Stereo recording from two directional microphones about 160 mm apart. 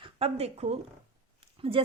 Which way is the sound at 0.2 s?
40° right (ahead or behind).